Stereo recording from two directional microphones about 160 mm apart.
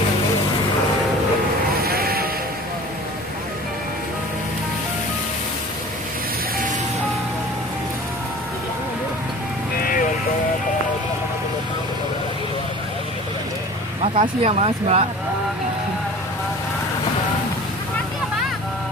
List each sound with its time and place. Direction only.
1.8 s sheep: 70° right (ahead or behind)
9.8 s music: 60° left (ahead or behind)
14.0 s speech: 35° right (ahead or behind)